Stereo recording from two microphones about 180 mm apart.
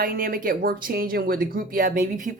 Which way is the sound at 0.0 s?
50° right (ahead or behind).